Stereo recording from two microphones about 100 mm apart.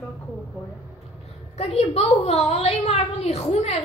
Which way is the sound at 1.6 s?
90° left.